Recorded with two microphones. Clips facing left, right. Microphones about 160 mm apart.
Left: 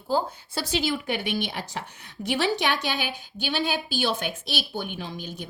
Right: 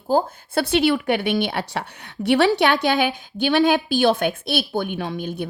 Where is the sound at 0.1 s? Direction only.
60° right (ahead or behind).